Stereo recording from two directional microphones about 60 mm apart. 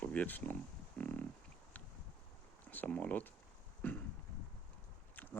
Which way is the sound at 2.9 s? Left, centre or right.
Left.